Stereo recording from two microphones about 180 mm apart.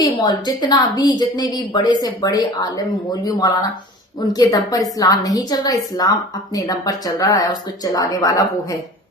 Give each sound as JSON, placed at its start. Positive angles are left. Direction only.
{"t": 0.0, "sound": "speech", "side_deg": 20}